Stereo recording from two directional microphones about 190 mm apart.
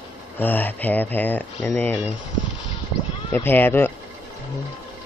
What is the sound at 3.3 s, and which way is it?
Speech, 10° left (ahead or behind).